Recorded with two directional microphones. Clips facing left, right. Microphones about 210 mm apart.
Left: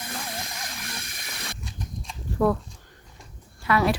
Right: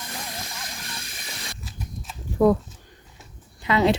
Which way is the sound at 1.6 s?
Centre (ahead or behind).